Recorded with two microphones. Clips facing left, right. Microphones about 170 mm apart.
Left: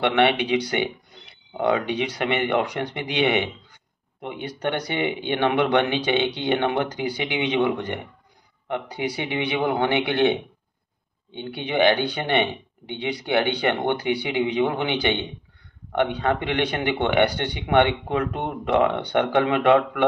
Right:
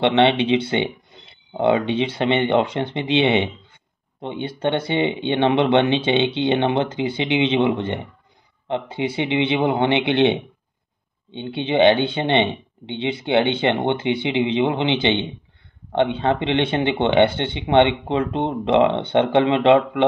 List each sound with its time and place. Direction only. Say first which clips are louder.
0.0 s speech: right 3 dB; 25° right (ahead or behind)